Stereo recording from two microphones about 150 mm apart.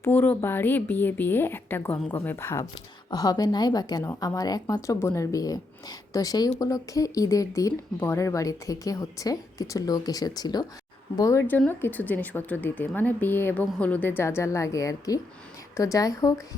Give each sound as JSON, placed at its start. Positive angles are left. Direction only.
{"t": 0.0, "sound": "speech", "side_deg": 15}